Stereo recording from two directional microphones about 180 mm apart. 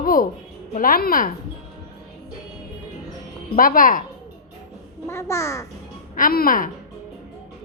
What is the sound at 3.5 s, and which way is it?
Speech, 50° left (ahead or behind).